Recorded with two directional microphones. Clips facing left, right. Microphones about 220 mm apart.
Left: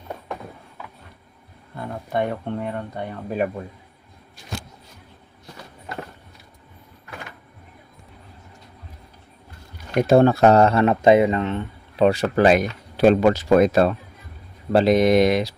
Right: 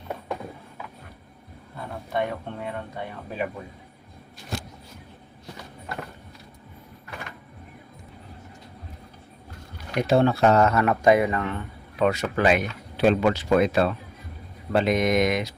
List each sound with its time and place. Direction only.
2.1 s speech: 45° left (ahead or behind)
10.1 s speech: 45° left (ahead or behind)